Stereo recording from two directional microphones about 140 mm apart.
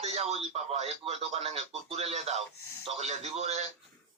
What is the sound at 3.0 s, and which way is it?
Speech, 55° right (ahead or behind).